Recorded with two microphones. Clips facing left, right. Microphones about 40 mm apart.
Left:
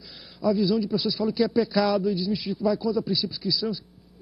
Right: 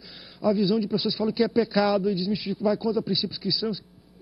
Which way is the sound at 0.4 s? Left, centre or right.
Right.